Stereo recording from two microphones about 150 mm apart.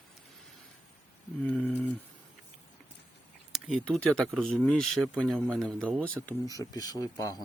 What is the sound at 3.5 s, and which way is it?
Speech, centre (ahead or behind).